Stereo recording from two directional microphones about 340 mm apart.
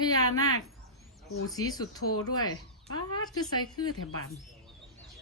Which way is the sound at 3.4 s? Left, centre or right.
Centre.